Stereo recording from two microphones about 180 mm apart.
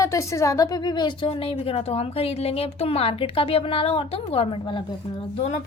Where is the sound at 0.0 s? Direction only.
15° left (ahead or behind).